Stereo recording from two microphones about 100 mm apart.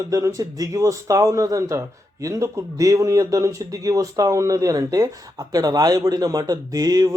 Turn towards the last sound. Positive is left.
turn(degrees=-40)  # may be behind; listen again after turning